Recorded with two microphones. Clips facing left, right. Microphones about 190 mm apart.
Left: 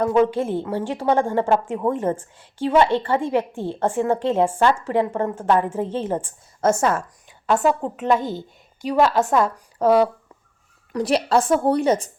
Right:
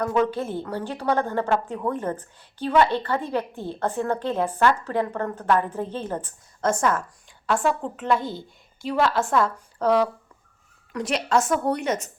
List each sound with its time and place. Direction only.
0.0 s a woman's voice: 30° left (ahead or behind)
10.9 s a woman's voice: 35° left (ahead or behind)